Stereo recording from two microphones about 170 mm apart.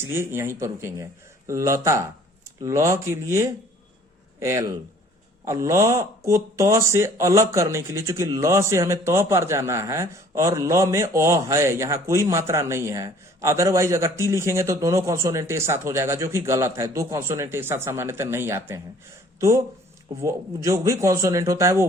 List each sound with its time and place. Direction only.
0.0 s a man's voice: 15° right (ahead or behind)
20.2 s speech: 15° right (ahead or behind)